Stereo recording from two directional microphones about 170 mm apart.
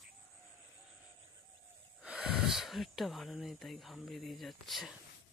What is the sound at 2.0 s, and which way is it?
Speech, 5° right (ahead or behind).